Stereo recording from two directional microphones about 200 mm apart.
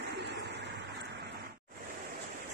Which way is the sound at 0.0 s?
60° right (ahead or behind).